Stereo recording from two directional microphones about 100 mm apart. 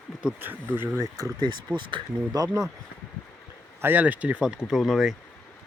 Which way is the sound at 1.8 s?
50° right (ahead or behind).